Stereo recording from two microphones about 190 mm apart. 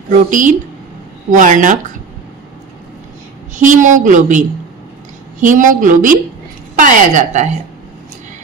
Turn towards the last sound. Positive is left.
turn(degrees=-40)  # may be behind; listen again after turning